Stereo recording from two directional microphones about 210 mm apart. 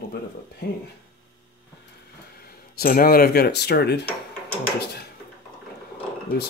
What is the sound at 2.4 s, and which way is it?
Speech, 45° left (ahead or behind).